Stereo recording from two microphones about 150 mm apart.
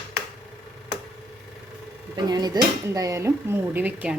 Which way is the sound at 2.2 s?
25° right (ahead or behind).